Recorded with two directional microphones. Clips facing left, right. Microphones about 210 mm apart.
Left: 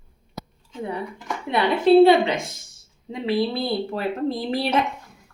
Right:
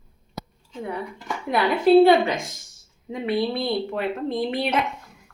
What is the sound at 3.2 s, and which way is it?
A woman's voice, 35° left (ahead or behind).